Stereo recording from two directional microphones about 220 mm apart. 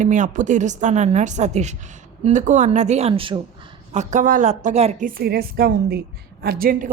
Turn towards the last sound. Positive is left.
turn(degrees=-40)  # may be behind; listen again after turning